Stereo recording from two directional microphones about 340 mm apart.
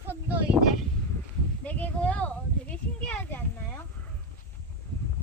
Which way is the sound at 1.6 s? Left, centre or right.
Centre.